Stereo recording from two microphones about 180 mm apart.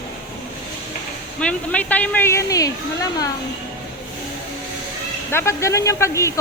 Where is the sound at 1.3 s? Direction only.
5° left (ahead or behind).